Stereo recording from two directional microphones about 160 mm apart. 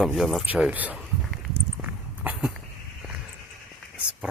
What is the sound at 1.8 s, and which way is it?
Walk, 10° right (ahead or behind).